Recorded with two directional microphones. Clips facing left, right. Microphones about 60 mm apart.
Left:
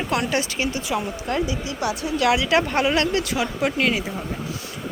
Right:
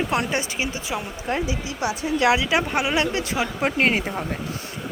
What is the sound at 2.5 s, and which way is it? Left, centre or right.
Speech, centre.